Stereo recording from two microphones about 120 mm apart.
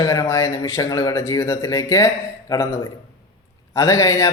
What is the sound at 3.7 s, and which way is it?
Speech, 25° left (ahead or behind).